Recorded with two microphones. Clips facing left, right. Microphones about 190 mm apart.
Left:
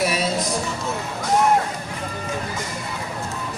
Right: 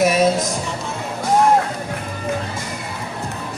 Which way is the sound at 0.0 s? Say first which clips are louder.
Right 7 dB; 45° right (ahead or behind).